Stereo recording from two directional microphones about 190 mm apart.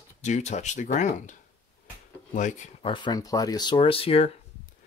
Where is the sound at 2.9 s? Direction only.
25° left (ahead or behind).